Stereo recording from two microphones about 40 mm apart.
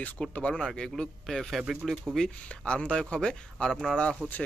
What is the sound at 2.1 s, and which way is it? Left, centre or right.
Speech, right.